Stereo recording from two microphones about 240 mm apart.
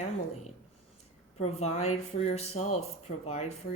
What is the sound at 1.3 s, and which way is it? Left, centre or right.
Speech, left.